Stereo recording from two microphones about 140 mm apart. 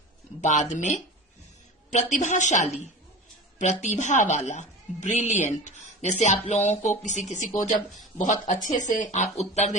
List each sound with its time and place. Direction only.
0.4 s a woman's voice: 60° left (ahead or behind)